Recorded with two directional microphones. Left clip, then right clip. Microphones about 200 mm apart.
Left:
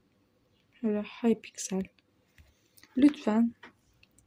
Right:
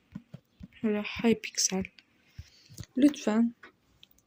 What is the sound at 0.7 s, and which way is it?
Speech, centre (ahead or behind).